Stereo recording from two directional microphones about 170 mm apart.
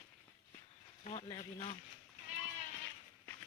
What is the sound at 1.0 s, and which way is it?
Speech, 35° left (ahead or behind).